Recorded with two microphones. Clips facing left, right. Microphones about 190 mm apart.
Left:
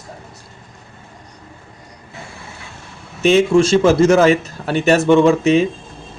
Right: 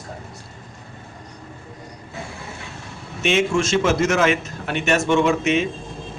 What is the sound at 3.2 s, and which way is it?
A man's voice, 35° left (ahead or behind).